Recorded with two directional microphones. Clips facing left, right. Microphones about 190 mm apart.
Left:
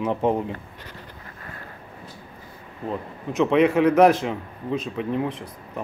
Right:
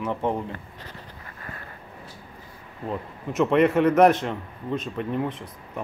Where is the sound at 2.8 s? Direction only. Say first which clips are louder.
Left 1 dB; centre (ahead or behind).